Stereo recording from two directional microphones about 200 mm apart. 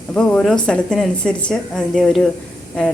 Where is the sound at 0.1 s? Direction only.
5° left (ahead or behind).